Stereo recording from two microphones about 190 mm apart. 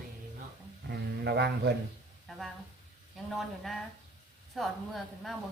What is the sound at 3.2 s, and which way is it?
A woman's voice, centre (ahead or behind).